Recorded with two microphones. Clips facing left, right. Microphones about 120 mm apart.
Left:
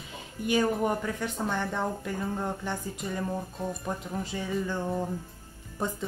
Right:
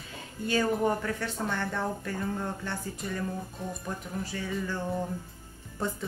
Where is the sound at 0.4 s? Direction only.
15° left (ahead or behind).